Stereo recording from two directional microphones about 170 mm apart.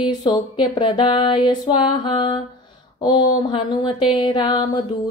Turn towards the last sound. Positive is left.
turn(degrees=25)  # may be behind; listen again after turning